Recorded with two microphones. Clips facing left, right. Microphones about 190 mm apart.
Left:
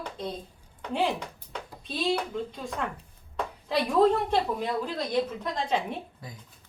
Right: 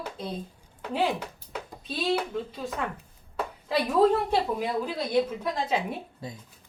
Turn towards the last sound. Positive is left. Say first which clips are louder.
# even
turn(degrees=-5)  # may be behind; listen again after turning